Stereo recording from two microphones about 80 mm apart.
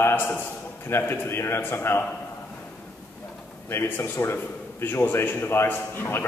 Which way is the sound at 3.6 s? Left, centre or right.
Left.